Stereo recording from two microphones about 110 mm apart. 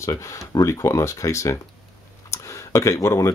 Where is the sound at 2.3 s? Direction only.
25° left (ahead or behind).